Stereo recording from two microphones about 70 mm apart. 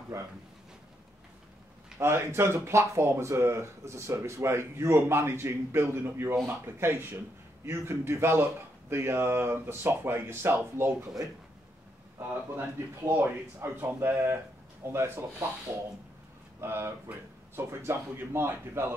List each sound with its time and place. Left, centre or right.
2.0 s speech: right
12.5 s speech: right
16.6 s speech: right